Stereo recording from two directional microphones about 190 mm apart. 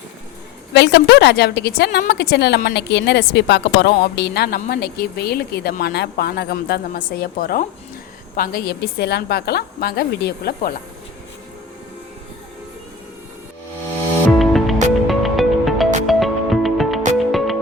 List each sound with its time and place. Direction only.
0.7 s a woman's voice: 65° left (ahead or behind)
14.3 s music: centre (ahead or behind)